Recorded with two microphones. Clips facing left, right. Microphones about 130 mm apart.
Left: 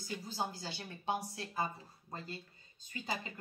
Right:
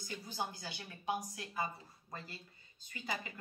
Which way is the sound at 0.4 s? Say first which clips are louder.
Left 1 dB; 25° left (ahead or behind).